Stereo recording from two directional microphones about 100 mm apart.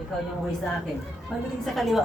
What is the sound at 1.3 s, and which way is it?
Speech, 5° left (ahead or behind).